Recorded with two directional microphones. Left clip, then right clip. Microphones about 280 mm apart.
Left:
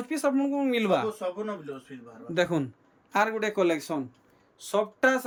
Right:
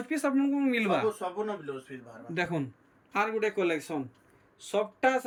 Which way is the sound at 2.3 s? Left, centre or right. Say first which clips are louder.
Left 5 dB; centre.